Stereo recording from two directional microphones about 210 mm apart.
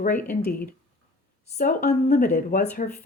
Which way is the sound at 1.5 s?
35° left (ahead or behind).